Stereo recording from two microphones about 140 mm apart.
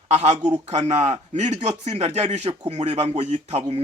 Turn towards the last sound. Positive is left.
turn(degrees=-45)  # may be behind; listen again after turning